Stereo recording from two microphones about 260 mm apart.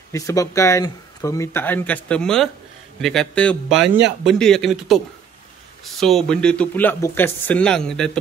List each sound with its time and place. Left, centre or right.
0.1 s speech: centre
3.8 s speech: right
4.3 s speech: centre